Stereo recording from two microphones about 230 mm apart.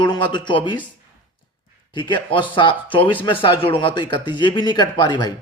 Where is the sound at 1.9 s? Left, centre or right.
Centre.